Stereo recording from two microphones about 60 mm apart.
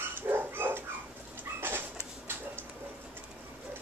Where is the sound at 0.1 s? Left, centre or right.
Right.